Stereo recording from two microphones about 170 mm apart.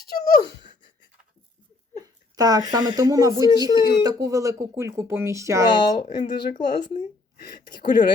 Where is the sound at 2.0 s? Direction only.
25° right (ahead or behind).